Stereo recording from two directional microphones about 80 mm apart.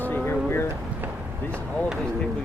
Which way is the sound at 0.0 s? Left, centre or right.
Left.